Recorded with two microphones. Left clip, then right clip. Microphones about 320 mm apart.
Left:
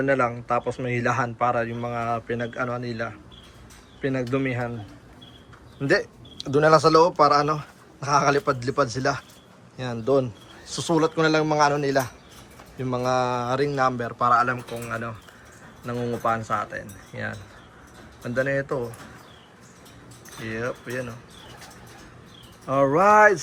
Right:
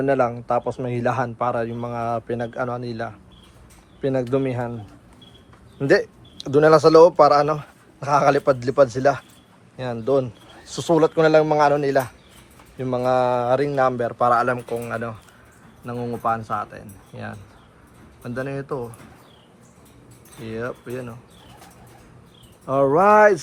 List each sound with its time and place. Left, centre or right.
0.0 s speech: centre
4.3 s speech: centre
6.0 s speech: centre
20.5 s speech: centre
22.6 s speech: centre